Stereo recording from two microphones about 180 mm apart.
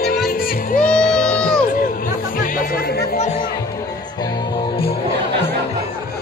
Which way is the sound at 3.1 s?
35° left (ahead or behind).